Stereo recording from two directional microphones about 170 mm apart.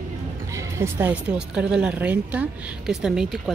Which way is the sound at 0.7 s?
15° right (ahead or behind).